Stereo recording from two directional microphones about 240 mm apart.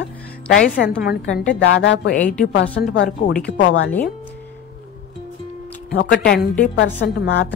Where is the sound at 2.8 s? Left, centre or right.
Left.